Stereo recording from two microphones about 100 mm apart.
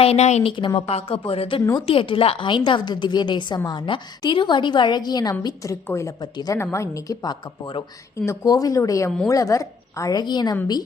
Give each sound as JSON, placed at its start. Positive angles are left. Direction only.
{"t": 0.0, "sound": "speech", "side_deg": 90}
{"t": 0.8, "sound": "a woman's voice", "side_deg": 80}
{"t": 5.9, "sound": "speech", "side_deg": 30}
{"t": 6.3, "sound": "a woman's voice", "side_deg": 40}
{"t": 6.6, "sound": "a woman's voice", "side_deg": 25}